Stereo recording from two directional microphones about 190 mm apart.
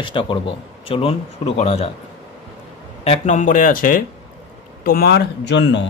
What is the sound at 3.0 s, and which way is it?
Speech, 40° left (ahead or behind).